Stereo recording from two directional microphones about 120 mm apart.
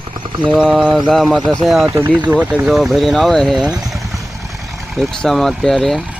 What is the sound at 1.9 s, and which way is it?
Speech, 25° right (ahead or behind).